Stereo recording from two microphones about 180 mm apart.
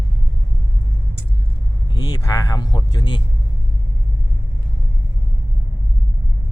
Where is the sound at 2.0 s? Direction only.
20° left (ahead or behind).